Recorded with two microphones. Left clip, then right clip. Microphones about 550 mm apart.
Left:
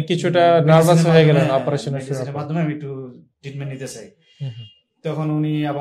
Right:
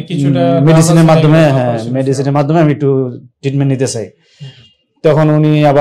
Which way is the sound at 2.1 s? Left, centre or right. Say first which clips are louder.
Right 15 dB; right.